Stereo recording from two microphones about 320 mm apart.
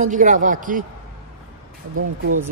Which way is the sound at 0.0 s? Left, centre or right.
Right.